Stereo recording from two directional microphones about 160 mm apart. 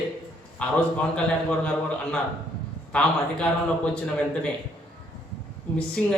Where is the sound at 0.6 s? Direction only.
5° left (ahead or behind).